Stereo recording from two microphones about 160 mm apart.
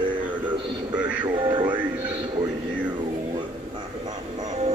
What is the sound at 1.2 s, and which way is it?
Music, 30° right (ahead or behind).